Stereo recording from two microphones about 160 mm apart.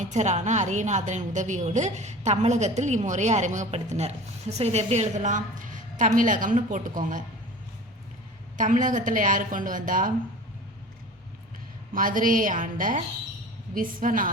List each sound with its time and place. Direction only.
0.0 s a woman's voice: 45° right (ahead or behind)
8.5 s a woman's voice: 55° right (ahead or behind)
11.9 s a woman's voice: 60° right (ahead or behind)